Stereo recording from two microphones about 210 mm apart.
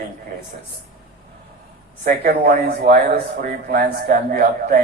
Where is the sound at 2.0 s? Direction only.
45° right (ahead or behind).